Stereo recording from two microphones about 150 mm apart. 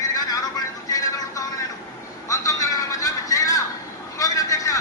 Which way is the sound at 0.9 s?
25° left (ahead or behind).